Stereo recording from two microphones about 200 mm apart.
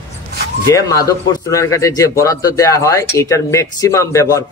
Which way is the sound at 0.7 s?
15° left (ahead or behind).